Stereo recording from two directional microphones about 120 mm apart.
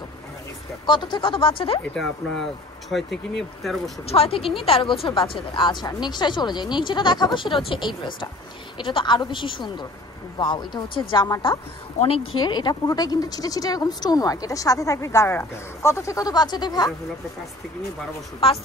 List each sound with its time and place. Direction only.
0.8 s speech: 40° left (ahead or behind)
2.9 s speech: centre (ahead or behind)
4.0 s speech: 55° left (ahead or behind)
12.0 s speech: 50° left (ahead or behind)
12.5 s speech: 35° left (ahead or behind)
18.4 s speech: 50° left (ahead or behind)